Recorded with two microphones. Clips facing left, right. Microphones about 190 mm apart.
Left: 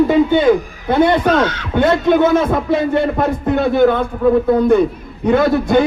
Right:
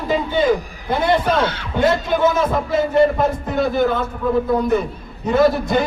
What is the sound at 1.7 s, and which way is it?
A man's voice, 60° left (ahead or behind).